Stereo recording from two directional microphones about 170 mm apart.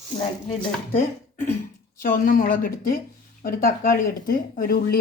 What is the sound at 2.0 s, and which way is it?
Speech, 55° left (ahead or behind).